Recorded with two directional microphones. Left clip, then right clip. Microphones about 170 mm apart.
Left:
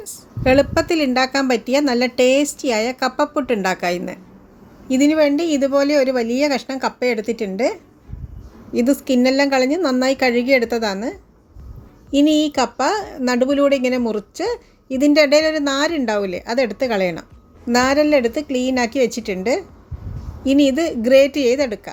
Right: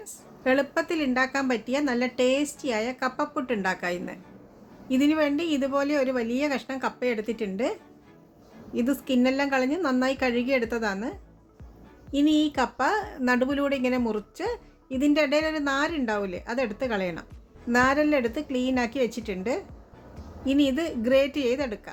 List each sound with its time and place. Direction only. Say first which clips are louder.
0.0 s a woman's voice: left 9 dB; 30° left (ahead or behind)